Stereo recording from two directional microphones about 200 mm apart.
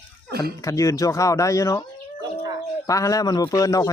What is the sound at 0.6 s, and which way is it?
Speech, 15° left (ahead or behind).